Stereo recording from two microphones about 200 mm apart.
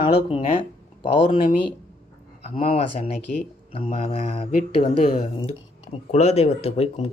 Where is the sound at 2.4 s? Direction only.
30° left (ahead or behind).